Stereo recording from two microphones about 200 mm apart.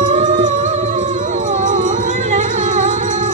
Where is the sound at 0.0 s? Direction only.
35° right (ahead or behind).